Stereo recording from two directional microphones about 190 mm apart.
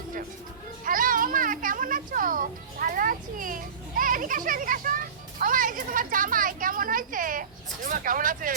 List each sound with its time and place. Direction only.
0.9 s children playing: 45° right (ahead or behind)
7.9 s speech: 45° right (ahead or behind)